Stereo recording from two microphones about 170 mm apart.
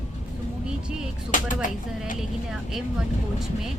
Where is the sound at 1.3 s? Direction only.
50° left (ahead or behind).